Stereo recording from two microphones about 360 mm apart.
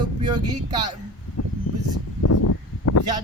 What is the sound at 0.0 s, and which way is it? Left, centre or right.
Speech, centre.